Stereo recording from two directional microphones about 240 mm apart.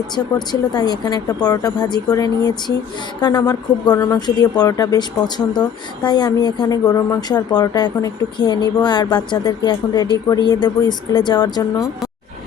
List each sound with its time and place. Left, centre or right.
0.3 s speech: centre